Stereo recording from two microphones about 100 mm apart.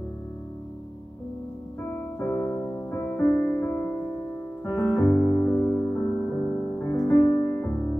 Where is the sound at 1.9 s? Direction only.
15° left (ahead or behind).